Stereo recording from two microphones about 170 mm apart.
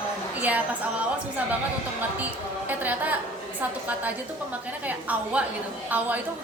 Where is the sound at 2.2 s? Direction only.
10° right (ahead or behind).